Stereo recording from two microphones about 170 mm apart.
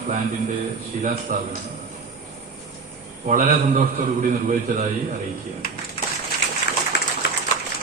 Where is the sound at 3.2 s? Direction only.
50° right (ahead or behind).